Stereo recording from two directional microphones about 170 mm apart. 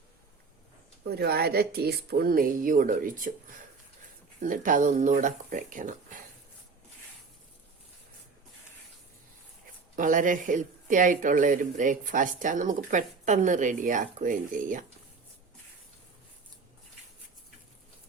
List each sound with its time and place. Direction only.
1.0 s speech: 65° right (ahead or behind)
4.4 s speech: 50° right (ahead or behind)
9.9 s speech: 50° right (ahead or behind)